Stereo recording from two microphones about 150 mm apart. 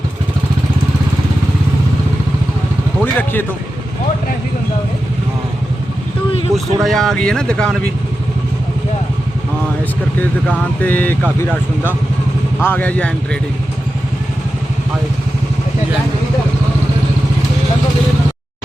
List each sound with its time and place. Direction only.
3.0 s a man's voice: 10° left (ahead or behind)
6.5 s speech: 20° right (ahead or behind)
6.8 s speech: centre (ahead or behind)
10.2 s speech: 10° left (ahead or behind)